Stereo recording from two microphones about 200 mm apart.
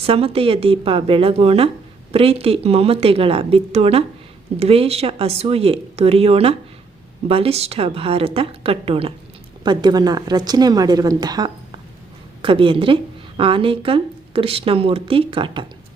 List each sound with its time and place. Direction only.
0.0 s a woman's voice: 30° right (ahead or behind)